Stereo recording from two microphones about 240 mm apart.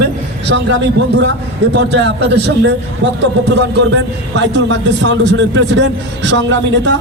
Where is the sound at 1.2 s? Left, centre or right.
Right.